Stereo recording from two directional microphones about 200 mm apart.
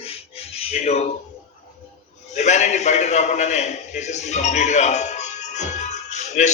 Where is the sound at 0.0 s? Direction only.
30° left (ahead or behind).